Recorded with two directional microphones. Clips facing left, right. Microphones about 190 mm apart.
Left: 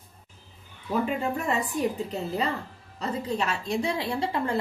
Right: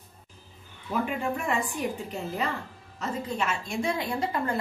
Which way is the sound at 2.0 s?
35° left (ahead or behind).